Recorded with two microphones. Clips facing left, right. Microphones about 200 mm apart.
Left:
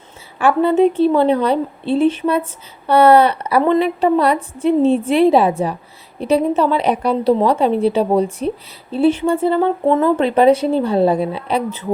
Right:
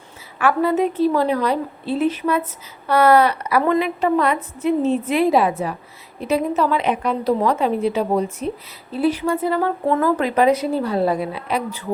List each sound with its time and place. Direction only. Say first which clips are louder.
0.3 s a woman's voice: left 4 dB; 30° left (ahead or behind)